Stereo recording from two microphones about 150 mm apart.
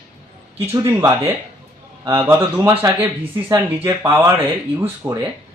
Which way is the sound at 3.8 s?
20° right (ahead or behind).